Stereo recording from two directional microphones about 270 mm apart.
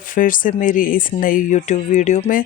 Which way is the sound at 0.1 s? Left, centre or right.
Left.